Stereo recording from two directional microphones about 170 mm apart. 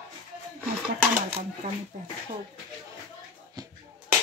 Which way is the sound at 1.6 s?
45° right (ahead or behind).